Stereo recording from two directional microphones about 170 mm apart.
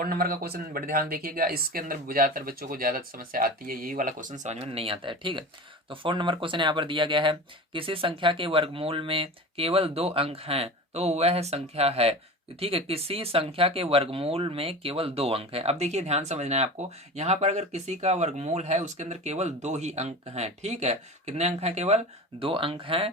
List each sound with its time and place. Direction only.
0.0 s speech: 60° right (ahead or behind); by 23.0 s 30° right (ahead or behind)